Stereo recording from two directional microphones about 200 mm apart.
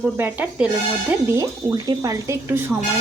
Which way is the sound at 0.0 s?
10° right (ahead or behind).